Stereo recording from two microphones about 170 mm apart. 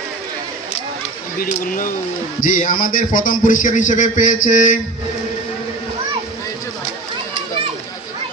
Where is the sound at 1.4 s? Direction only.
55° left (ahead or behind).